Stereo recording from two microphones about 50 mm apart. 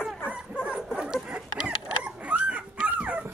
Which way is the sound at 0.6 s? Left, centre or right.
Right.